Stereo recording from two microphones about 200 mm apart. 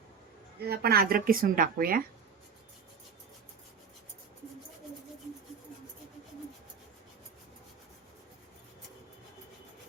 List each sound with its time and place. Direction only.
0.6 s a woman's voice: 55° right (ahead or behind)